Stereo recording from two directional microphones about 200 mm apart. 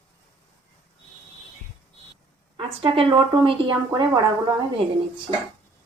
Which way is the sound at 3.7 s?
15° right (ahead or behind).